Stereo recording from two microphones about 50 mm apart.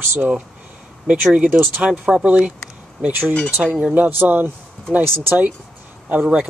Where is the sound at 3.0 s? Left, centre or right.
Right.